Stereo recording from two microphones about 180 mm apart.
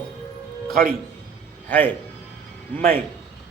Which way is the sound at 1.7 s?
10° left (ahead or behind).